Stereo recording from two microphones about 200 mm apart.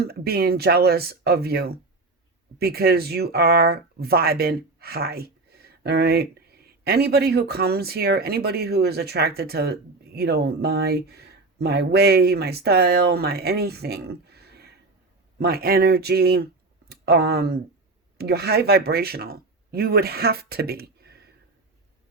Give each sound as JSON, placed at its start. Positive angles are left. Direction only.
{"t": 0.0, "sound": "speech", "side_deg": -50}